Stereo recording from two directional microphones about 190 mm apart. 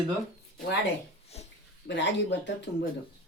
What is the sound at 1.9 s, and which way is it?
Speech, 70° left (ahead or behind).